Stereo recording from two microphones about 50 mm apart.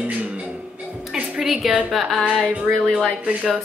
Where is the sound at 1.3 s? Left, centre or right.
Centre.